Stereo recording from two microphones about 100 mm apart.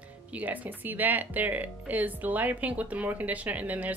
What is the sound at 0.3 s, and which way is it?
Speech, 15° right (ahead or behind).